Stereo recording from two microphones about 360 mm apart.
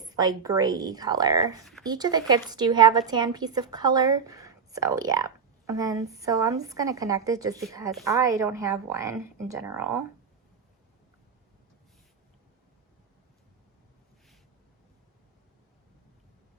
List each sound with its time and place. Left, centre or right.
0.0 s a woman's voice: centre